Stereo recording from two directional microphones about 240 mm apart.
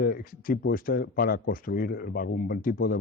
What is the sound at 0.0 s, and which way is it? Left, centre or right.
A man's voice, left.